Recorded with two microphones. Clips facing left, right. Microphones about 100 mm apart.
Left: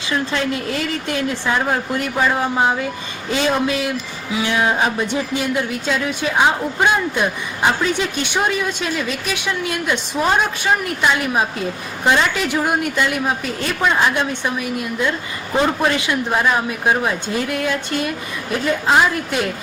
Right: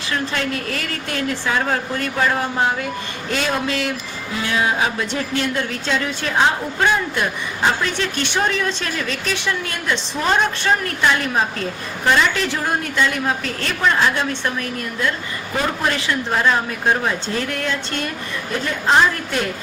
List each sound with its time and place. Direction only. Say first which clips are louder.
0.1 s a woman's voice: left 3 dB; 15° left (ahead or behind)